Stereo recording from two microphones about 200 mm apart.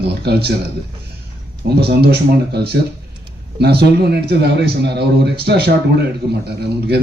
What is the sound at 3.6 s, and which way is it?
A man's voice, 55° right (ahead or behind).